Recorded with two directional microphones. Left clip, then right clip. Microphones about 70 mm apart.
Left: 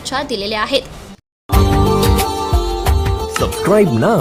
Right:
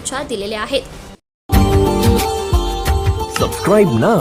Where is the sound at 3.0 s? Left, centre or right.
Centre.